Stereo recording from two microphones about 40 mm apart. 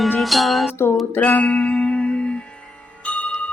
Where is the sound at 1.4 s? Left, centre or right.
Left.